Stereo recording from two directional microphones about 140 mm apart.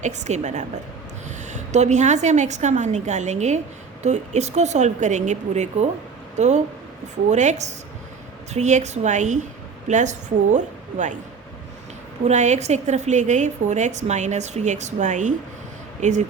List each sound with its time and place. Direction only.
0.0 s a woman's voice: 55° right (ahead or behind)
12.2 s a woman's voice: 55° right (ahead or behind)